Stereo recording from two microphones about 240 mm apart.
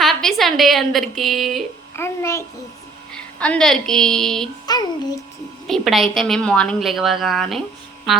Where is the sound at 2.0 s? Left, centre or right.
Centre.